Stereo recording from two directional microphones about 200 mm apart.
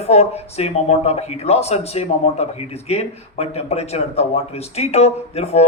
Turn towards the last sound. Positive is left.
turn(degrees=30)  # may be behind; listen again after turning